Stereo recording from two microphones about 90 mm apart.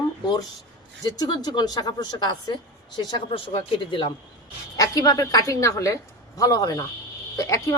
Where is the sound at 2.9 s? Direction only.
75° left (ahead or behind).